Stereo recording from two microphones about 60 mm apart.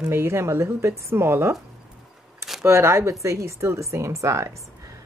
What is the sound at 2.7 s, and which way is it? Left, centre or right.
Speech, right.